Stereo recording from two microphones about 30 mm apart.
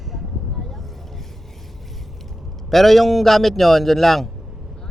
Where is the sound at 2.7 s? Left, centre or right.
Centre.